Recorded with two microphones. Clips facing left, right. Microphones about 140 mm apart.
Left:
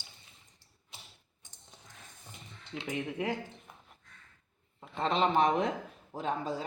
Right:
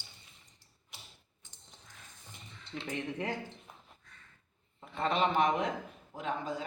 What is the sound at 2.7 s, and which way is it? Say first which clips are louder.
Speech: left 2 dB; 10° left (ahead or behind).